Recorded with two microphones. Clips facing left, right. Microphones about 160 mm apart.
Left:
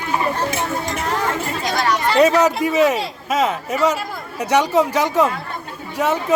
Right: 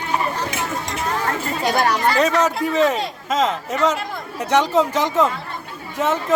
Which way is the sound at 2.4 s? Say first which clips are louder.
Left 2 dB; 10° left (ahead or behind).